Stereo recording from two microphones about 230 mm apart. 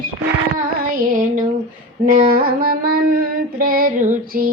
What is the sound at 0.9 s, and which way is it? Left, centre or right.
Music, right.